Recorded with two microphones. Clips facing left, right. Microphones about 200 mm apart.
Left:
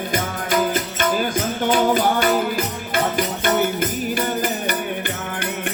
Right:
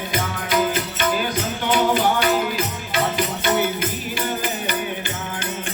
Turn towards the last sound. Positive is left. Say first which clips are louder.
# left 2 dB
turn(degrees=55)  # may be behind; listen again after turning